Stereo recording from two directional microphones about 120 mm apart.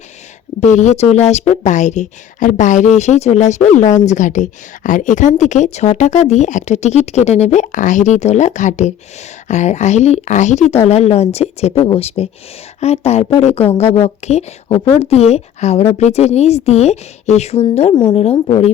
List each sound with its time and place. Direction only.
0.6 s a woman's voice: 75° left (ahead or behind)
10.8 s a woman's voice: 60° left (ahead or behind)